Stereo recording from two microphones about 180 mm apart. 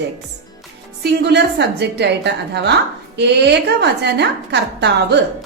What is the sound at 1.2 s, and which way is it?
A woman's voice, 70° right (ahead or behind).